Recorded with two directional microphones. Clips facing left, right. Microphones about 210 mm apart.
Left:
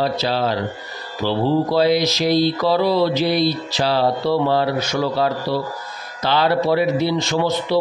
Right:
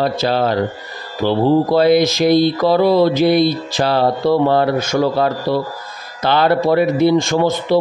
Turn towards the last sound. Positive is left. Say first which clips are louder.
# right 6 dB
turn(degrees=-50)  # may be behind; listen again after turning